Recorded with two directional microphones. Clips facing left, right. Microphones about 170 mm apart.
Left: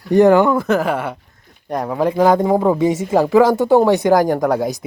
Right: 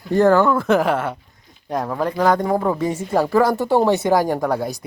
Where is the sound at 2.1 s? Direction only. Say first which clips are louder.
Left 4 dB; 20° left (ahead or behind).